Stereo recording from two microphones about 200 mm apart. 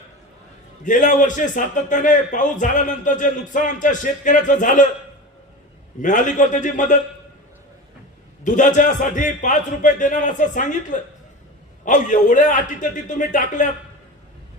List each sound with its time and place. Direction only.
0.9 s speech: 40° left (ahead or behind)
6.0 s speech: 40° left (ahead or behind)
8.4 s speech: 40° left (ahead or behind)